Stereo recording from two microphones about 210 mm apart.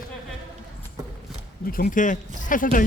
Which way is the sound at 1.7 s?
45° left (ahead or behind).